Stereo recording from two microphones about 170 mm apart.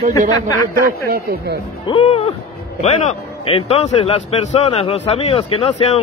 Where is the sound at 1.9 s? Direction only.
35° left (ahead or behind).